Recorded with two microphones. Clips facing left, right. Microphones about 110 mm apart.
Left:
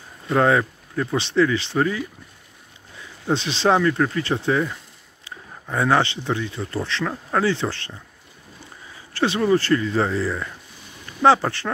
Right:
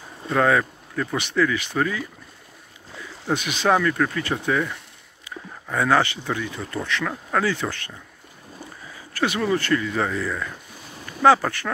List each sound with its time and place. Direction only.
0.3 s speech: 30° left (ahead or behind)
3.3 s speech: 30° left (ahead or behind)
9.1 s speech: 30° left (ahead or behind)